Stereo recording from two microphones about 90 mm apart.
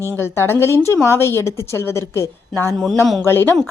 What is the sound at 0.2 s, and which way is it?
A woman's voice, 25° left (ahead or behind).